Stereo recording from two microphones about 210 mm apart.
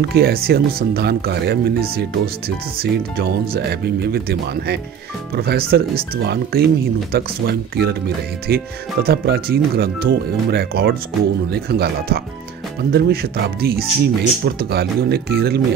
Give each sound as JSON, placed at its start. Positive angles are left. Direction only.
{"t": 0.1, "sound": "speech", "side_deg": -45}